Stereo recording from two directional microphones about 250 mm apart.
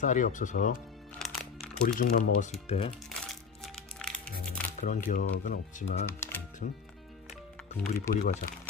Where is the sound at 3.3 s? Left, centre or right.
Centre.